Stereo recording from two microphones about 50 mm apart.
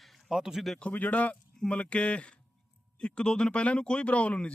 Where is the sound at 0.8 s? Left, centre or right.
Left.